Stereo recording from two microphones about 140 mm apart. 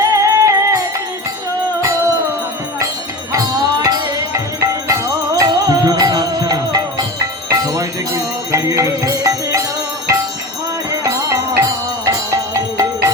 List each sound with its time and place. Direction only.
0.0 s music: 25° right (ahead or behind)
3.8 s music: 25° right (ahead or behind)
11.0 s music: 25° right (ahead or behind)